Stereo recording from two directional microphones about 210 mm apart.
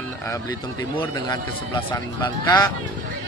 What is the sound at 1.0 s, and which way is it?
A man's voice, 20° left (ahead or behind).